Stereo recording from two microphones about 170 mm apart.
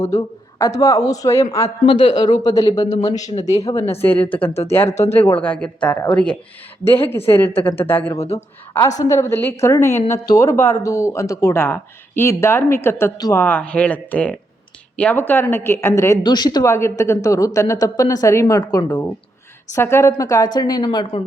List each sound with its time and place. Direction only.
0.0 s a woman's voice: 20° left (ahead or behind)
1.6 s a woman's voice: 30° left (ahead or behind); by 4.5 s 10° left (ahead or behind)
4.9 s speech: 40° left (ahead or behind)
5.4 s speech: 5° left (ahead or behind)
8.2 s speech: 40° left (ahead or behind)
9.0 s speech: 20° left (ahead or behind)
13.4 s a woman's voice: 10° left (ahead or behind); by 21.2 s 25° left (ahead or behind)